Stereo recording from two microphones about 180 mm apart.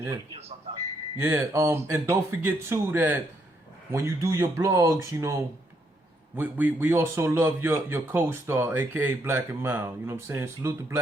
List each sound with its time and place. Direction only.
0.3 s speech: 35° right (ahead or behind)
1.1 s a man's voice: 15° right (ahead or behind)